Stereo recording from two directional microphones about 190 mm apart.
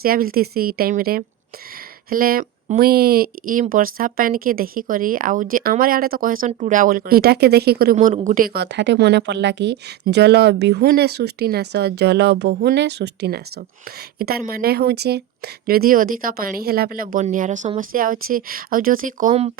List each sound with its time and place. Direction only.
0.0 s a woman's voice: 50° right (ahead or behind)
7.9 s a woman's voice: 40° right (ahead or behind)